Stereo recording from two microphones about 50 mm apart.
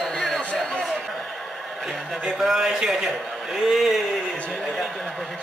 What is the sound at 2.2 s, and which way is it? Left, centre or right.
Speech, centre.